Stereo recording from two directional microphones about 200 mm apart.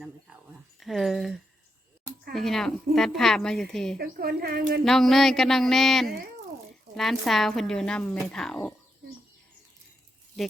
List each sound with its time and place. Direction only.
0.8 s a woman's voice: centre (ahead or behind)
3.9 s a woman's voice: 50° right (ahead or behind)
4.9 s a woman's voice: centre (ahead or behind)